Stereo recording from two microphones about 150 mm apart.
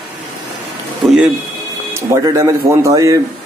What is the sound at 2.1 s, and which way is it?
A man's voice, 20° right (ahead or behind).